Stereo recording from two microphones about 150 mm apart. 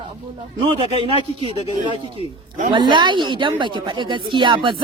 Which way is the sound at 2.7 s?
30° right (ahead or behind).